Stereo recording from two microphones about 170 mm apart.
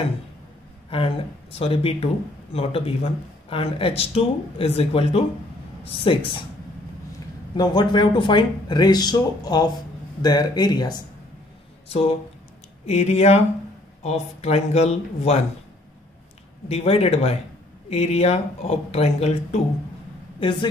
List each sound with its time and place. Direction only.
0.8 s speech: 30° left (ahead or behind)
7.5 s speech: 25° left (ahead or behind)
12.8 s speech: 40° left (ahead or behind)
16.6 s speech: 35° left (ahead or behind)
20.3 s speech: 30° left (ahead or behind)